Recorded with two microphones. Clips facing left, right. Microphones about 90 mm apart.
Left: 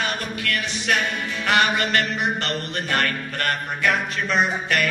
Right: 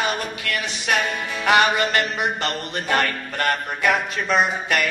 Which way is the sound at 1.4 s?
15° right (ahead or behind).